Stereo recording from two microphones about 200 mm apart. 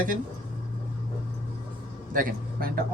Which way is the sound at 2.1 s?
45° right (ahead or behind).